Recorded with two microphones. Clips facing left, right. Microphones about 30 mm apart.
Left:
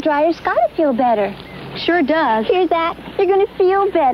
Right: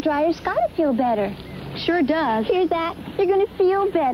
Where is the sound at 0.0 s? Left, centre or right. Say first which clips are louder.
Left 5 dB; left.